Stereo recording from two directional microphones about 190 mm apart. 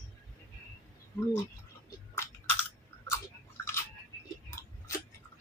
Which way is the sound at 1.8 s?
15° left (ahead or behind).